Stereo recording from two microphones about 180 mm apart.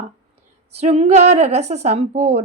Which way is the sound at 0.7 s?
35° right (ahead or behind).